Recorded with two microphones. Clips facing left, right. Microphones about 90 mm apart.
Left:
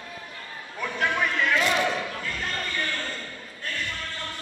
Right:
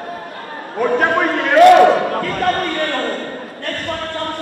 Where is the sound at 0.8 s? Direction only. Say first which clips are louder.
Right 11 dB; 55° right (ahead or behind).